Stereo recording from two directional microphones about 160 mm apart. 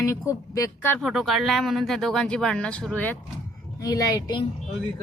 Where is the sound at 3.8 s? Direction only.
20° left (ahead or behind).